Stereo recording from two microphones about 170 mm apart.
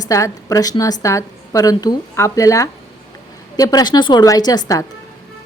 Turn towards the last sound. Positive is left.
turn(degrees=20)  # may be behind; listen again after turning